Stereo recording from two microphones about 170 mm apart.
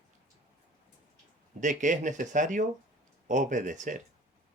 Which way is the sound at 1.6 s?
50° right (ahead or behind).